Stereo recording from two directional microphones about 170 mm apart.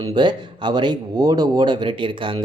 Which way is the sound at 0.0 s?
25° right (ahead or behind).